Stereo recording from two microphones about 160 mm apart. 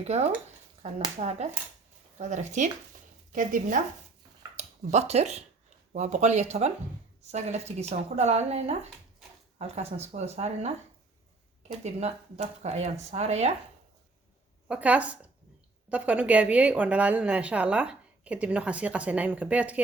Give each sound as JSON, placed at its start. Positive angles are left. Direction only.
{"t": 0.0, "sound": "speech", "side_deg": -45}
{"t": 3.3, "sound": "speech", "side_deg": -55}
{"t": 4.5, "sound": "speech", "side_deg": -45}
{"t": 11.8, "sound": "speech", "side_deg": -40}
{"t": 14.7, "sound": "a woman's voice", "side_deg": -10}